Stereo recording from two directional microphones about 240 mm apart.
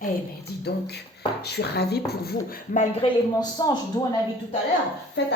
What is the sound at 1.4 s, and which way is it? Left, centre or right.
Speech, left.